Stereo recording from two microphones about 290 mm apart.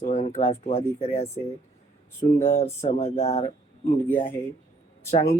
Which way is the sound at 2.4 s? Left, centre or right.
Left.